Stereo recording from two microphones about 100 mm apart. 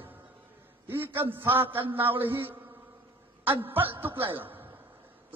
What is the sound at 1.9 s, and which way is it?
Speech, 20° right (ahead or behind).